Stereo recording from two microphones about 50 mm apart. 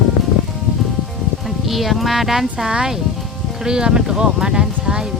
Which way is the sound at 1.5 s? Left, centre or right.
Centre.